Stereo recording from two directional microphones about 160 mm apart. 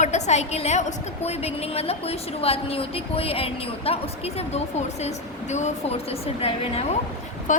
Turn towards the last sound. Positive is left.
turn(degrees=50)  # may be behind; listen again after turning